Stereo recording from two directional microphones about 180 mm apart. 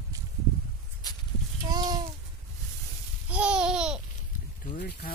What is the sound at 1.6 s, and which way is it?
Speech, 20° right (ahead or behind).